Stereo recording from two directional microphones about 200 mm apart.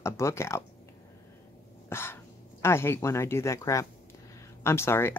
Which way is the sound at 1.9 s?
10° left (ahead or behind).